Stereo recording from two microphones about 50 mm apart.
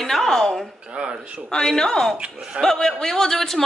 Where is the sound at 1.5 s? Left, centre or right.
Centre.